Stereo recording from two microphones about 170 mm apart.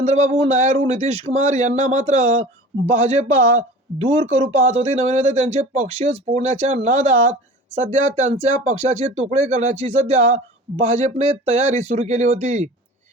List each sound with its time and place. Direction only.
0.0 s speech: 40° right (ahead or behind)
3.6 s speech: 35° right (ahead or behind)